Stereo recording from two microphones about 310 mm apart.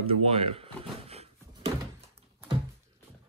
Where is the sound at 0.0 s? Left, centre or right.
Centre.